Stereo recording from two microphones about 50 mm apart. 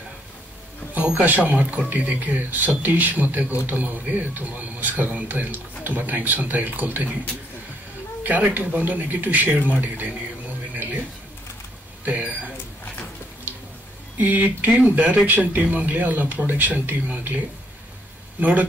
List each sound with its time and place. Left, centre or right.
1.2 s a man's voice: right
8.2 s a man's voice: right
10.7 s a sound: right
14.1 s a man's voice: right
18.4 s a man's voice: right